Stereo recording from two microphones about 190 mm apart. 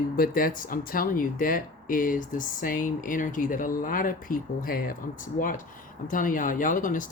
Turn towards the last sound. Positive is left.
turn(degrees=45)  # may be behind; listen again after turning